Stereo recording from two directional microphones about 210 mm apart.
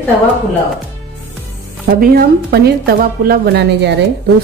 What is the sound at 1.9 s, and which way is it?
A woman's voice, 45° right (ahead or behind).